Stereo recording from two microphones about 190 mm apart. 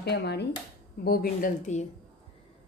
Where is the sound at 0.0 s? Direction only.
60° left (ahead or behind).